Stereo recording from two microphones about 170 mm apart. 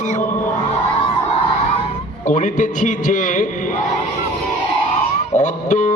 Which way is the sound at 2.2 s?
50° left (ahead or behind).